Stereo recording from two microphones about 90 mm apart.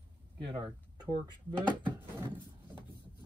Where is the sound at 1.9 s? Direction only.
25° right (ahead or behind).